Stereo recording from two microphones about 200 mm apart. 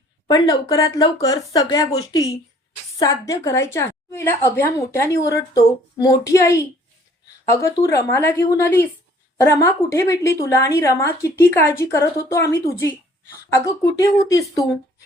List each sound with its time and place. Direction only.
0.3 s a woman's voice: 20° left (ahead or behind)
3.0 s a woman's voice: 15° left (ahead or behind)
14.0 s a woman's voice: 15° left (ahead or behind)